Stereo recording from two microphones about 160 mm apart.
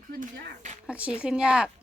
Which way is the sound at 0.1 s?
65° right (ahead or behind).